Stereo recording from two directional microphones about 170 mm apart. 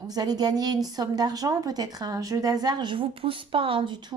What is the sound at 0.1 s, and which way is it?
A woman's voice, 25° right (ahead or behind).